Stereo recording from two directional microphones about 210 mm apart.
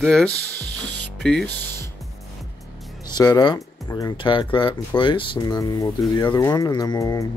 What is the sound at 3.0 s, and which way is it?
Speech, 20° left (ahead or behind).